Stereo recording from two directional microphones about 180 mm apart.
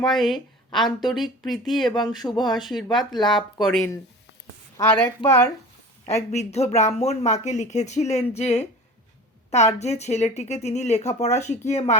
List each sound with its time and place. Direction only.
0.0 s a woman's voice: centre (ahead or behind)
1.9 s speech: 25° left (ahead or behind)
2.4 s speech: centre (ahead or behind)
4.8 s a woman's voice: 15° left (ahead or behind)
6.1 s speech: 40° left (ahead or behind)